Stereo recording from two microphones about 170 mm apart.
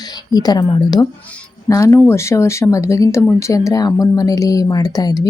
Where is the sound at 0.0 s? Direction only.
25° left (ahead or behind).